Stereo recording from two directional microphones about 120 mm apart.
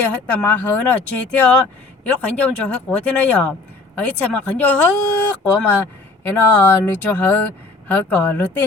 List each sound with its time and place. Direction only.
0.1 s speech: 15° left (ahead or behind)